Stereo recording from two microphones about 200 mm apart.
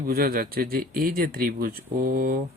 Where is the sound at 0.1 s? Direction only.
50° right (ahead or behind).